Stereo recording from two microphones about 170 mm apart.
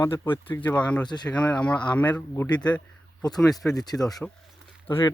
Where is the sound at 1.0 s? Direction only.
25° left (ahead or behind).